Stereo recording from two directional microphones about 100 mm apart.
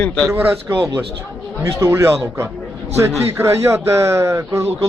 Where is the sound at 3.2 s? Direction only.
25° right (ahead or behind).